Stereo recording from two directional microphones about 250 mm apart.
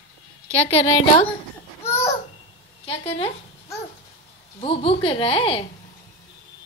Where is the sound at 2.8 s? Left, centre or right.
Left.